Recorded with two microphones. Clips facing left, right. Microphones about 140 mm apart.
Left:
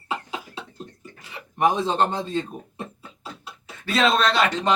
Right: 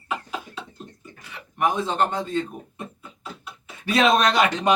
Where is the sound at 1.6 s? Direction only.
25° left (ahead or behind).